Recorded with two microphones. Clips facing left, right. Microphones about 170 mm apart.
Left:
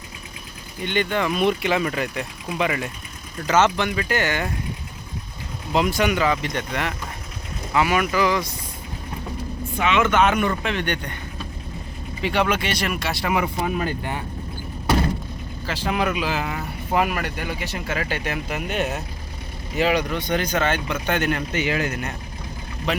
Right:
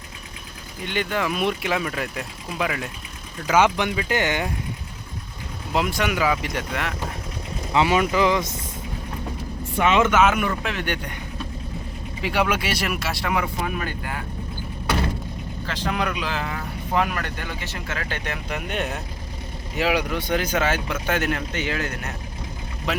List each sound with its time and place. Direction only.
0.9 s speech: 5° right (ahead or behind); by 4.4 s 20° right (ahead or behind)
5.7 s speech: centre (ahead or behind)
7.7 s speech: 25° right (ahead or behind)
10.1 s speech: 5° right (ahead or behind)
12.2 s speech: 5° right (ahead or behind)
13.3 s speech: 20° left (ahead or behind)
15.6 s speech: 5° left (ahead or behind)
21.6 s speech: 10° left (ahead or behind)
22.9 s speech: centre (ahead or behind)